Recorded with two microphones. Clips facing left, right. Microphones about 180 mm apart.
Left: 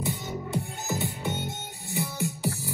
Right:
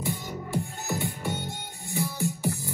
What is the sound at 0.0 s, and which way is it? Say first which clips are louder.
Music: left 1 dB; 20° left (ahead or behind).